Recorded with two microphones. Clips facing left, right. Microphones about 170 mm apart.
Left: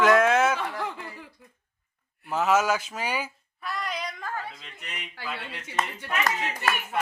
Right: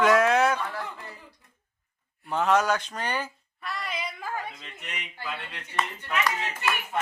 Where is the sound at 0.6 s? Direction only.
90° left.